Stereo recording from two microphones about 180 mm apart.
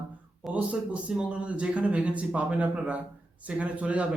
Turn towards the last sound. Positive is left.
turn(degrees=-5)  # may be behind; listen again after turning